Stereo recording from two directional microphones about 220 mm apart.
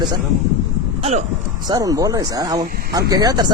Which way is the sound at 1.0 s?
30° right (ahead or behind).